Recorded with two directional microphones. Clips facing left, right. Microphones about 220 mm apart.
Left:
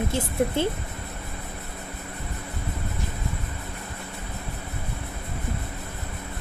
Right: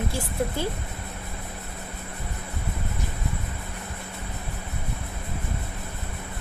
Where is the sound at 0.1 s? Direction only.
25° left (ahead or behind).